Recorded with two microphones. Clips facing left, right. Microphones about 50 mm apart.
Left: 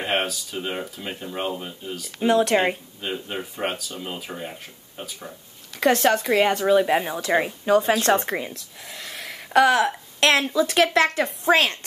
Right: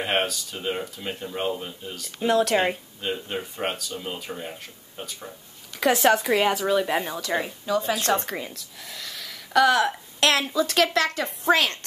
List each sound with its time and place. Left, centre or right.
0.0 s speech: centre
7.6 s speech: left
8.1 s a woman's voice: left
8.8 s a sound: left
9.8 s speech: centre; by 11.2 s left